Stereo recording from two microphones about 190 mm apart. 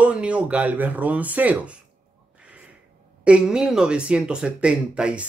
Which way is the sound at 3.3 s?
5° right (ahead or behind).